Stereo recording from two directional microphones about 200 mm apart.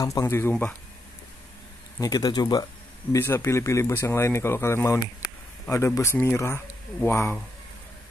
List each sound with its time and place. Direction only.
0.0 s speech: 15° left (ahead or behind)
2.0 s speech: 20° left (ahead or behind)